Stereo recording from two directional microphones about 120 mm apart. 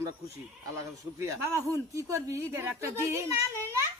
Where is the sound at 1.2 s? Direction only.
25° right (ahead or behind).